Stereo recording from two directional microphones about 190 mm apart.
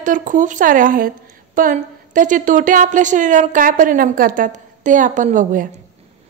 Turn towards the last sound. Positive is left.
turn(degrees=-45)  # may be behind; listen again after turning